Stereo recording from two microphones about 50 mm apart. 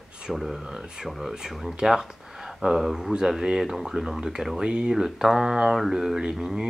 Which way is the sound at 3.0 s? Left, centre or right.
Centre.